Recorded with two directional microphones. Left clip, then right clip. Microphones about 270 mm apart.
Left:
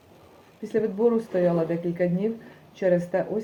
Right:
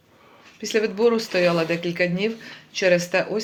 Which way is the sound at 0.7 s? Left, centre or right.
Right.